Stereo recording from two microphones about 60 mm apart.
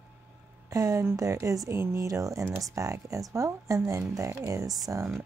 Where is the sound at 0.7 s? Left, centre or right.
Right.